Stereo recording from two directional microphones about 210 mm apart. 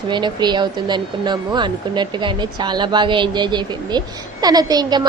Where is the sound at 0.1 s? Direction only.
20° right (ahead or behind).